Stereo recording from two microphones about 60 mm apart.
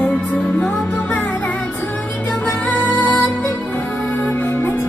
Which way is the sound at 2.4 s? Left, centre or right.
Left.